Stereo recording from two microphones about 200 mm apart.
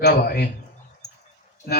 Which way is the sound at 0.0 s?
50° left (ahead or behind).